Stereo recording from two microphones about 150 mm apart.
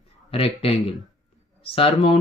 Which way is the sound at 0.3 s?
40° left (ahead or behind).